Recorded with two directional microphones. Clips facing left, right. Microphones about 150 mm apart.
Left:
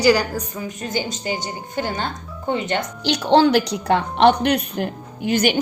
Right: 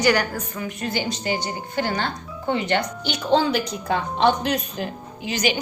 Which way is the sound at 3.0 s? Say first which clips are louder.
Left 7 dB; 80° left.